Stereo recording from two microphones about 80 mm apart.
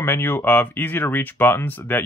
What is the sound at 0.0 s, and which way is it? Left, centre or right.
Speech, left.